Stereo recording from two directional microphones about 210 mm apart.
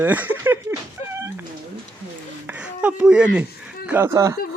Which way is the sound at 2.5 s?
5° right (ahead or behind).